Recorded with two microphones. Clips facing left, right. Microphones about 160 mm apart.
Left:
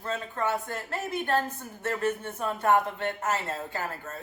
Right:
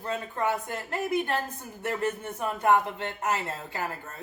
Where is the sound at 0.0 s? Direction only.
15° right (ahead or behind).